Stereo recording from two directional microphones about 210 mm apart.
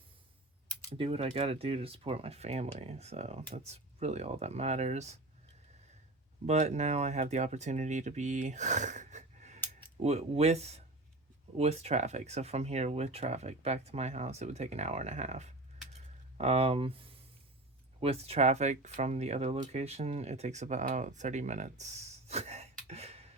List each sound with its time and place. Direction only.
0.9 s speech: 25° right (ahead or behind)
6.4 s speech: 30° right (ahead or behind)